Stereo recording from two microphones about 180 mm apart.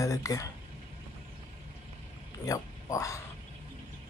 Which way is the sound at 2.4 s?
20° left (ahead or behind).